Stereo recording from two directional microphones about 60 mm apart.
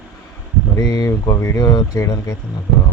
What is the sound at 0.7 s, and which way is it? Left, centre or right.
Speech, left.